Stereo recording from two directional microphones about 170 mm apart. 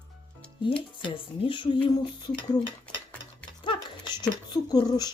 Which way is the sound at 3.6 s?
30° left (ahead or behind).